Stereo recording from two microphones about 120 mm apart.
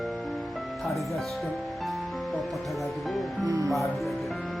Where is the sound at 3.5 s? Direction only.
25° right (ahead or behind).